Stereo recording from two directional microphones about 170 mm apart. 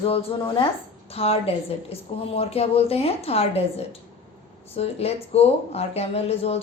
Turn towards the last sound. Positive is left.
turn(degrees=35)  # may be behind; listen again after turning